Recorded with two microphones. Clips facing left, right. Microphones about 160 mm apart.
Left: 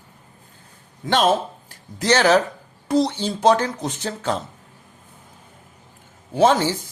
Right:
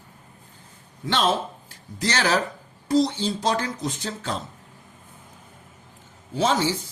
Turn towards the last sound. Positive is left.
turn(degrees=50)  # may be behind; listen again after turning